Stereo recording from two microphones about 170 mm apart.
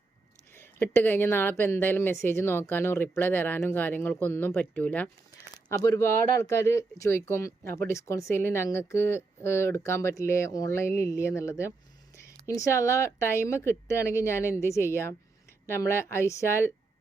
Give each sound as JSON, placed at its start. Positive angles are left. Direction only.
{"t": 0.5, "sound": "a woman's voice", "side_deg": 15}